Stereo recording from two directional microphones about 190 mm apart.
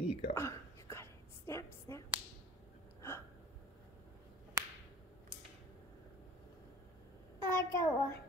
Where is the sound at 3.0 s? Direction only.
15° left (ahead or behind).